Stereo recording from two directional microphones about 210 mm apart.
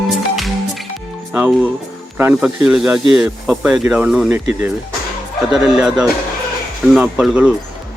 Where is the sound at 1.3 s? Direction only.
5° right (ahead or behind).